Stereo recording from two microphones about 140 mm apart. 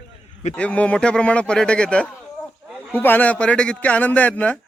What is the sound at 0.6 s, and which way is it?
Speech, 10° left (ahead or behind).